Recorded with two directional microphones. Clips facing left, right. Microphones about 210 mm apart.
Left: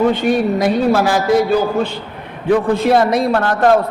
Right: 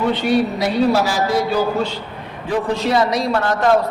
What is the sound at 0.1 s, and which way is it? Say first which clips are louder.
A man's voice: left 2 dB; 50° left (ahead or behind).